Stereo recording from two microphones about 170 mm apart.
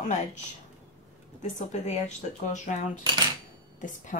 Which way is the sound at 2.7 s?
50° left (ahead or behind).